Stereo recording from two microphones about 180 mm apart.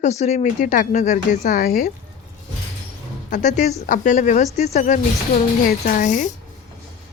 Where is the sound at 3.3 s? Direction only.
40° left (ahead or behind).